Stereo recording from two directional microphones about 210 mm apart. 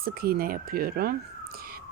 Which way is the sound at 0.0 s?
45° right (ahead or behind).